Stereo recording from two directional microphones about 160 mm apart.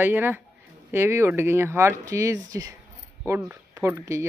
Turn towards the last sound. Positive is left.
turn(degrees=-15)  # may be behind; listen again after turning